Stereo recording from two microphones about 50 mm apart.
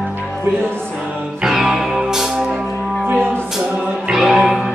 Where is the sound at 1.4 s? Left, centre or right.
Centre.